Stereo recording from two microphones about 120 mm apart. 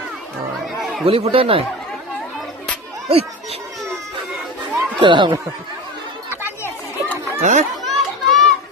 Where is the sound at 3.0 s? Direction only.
60° right (ahead or behind).